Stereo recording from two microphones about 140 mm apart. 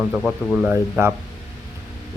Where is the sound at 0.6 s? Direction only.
15° right (ahead or behind).